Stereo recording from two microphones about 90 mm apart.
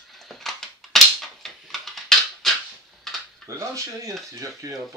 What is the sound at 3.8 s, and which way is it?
Dishes, 35° right (ahead or behind).